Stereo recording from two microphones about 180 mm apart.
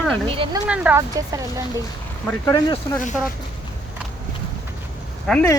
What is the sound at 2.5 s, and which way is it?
Speech, 20° left (ahead or behind).